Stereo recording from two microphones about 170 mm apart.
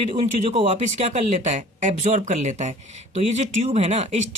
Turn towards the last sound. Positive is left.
turn(degrees=-40)  # may be behind; listen again after turning